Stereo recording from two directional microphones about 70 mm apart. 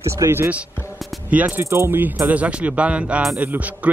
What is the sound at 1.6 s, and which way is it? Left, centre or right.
Speech, right.